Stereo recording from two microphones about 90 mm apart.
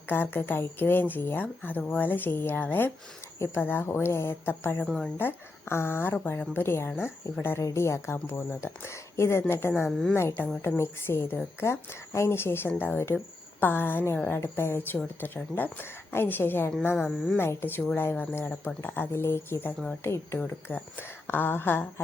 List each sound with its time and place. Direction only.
0.1 s speech: 25° left (ahead or behind)
4.9 s speech: 10° left (ahead or behind)
5.1 s speech: 25° left (ahead or behind)